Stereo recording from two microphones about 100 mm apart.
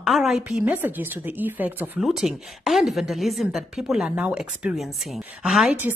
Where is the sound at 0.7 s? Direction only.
20° right (ahead or behind).